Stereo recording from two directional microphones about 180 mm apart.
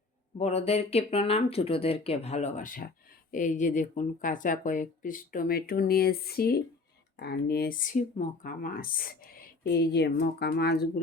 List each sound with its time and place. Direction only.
0.3 s speech: 35° left (ahead or behind); by 11.0 s 60° left (ahead or behind)